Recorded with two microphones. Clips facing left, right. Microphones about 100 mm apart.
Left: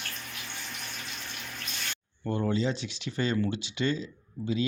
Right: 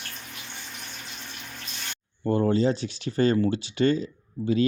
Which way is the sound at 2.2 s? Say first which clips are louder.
Right 6 dB; 40° right (ahead or behind).